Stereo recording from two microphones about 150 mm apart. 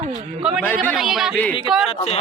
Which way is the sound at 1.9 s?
40° left (ahead or behind).